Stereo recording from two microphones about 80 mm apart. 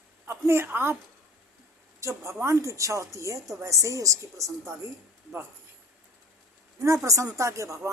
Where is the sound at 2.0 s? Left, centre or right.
Right.